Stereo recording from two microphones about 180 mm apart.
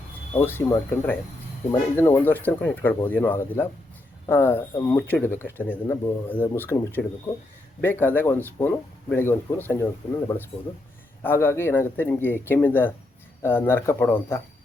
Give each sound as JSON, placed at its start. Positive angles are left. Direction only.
{"t": 0.4, "sound": "speech", "side_deg": 10}